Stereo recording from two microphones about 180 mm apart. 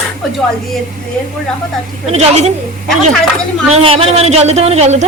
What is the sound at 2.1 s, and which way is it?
Speech, 35° right (ahead or behind).